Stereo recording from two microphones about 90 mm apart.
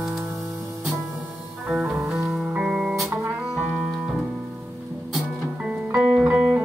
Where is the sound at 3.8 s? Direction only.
5° right (ahead or behind).